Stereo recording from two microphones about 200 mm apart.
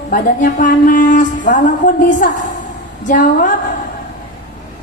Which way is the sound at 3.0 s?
40° left (ahead or behind).